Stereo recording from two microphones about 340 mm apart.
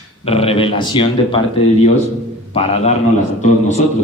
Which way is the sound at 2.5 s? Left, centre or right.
Centre.